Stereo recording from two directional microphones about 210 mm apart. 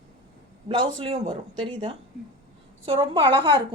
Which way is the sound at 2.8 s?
25° right (ahead or behind).